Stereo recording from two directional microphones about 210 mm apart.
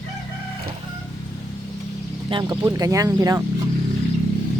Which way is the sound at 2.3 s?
20° right (ahead or behind).